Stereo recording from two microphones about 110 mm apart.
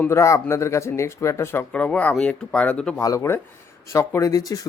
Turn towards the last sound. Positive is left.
turn(degrees=35)  # may be behind; listen again after turning